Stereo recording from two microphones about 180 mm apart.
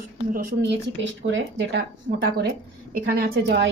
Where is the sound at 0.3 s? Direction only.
65° right (ahead or behind); by 1.8 s 85° right.